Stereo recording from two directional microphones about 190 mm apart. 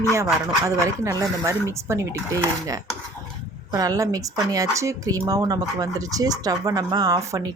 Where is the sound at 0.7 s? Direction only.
15° right (ahead or behind).